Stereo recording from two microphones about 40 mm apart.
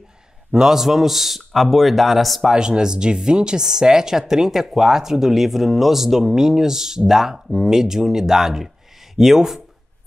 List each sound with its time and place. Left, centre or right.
0.5 s a man's voice: centre
2.5 s a woman's voice: centre